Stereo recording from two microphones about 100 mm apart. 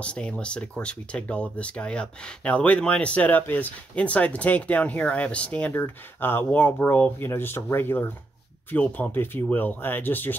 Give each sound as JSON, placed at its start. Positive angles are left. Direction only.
{"t": 0.0, "sound": "speech", "side_deg": 10}